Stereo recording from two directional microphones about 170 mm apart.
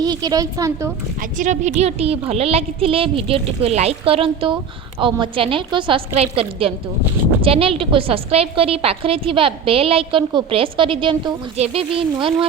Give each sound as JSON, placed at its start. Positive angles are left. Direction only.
{"t": 0.0, "sound": "a woman's voice", "side_deg": -25}
{"t": 1.2, "sound": "a woman's voice", "side_deg": -45}